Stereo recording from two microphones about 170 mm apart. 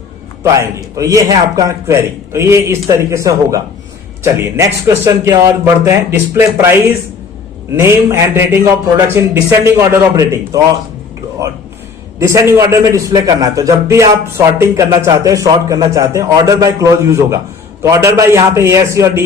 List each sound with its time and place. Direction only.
0.4 s a man's voice: 15° right (ahead or behind)
7.8 s a man's voice: 15° right (ahead or behind)
12.3 s a man's voice: 20° right (ahead or behind)